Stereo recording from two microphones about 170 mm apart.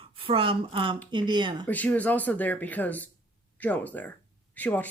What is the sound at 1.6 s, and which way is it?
Speech, 10° left (ahead or behind).